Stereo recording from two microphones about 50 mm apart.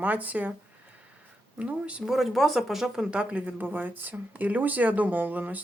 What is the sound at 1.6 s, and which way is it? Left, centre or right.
Speech, right.